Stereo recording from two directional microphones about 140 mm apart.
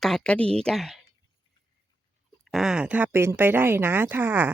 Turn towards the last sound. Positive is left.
turn(degrees=-15)  # may be behind; listen again after turning